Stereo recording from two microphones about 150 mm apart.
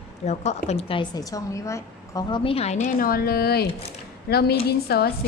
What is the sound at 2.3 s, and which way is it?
Speech, 35° left (ahead or behind).